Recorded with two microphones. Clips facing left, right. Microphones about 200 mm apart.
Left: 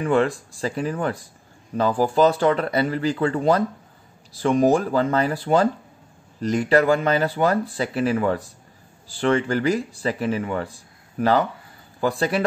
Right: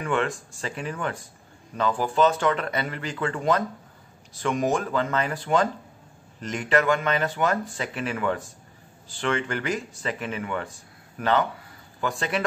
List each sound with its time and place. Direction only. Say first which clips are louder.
0.0 s speech: left 6 dB; 35° left (ahead or behind)